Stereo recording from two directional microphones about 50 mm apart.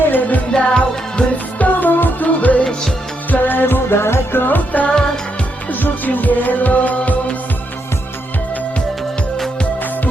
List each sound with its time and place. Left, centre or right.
0.1 s music: left
0.5 s music: left
4.4 s music: left